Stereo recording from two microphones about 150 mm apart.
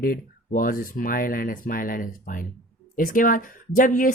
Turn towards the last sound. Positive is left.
turn(degrees=65)  # may be behind; listen again after turning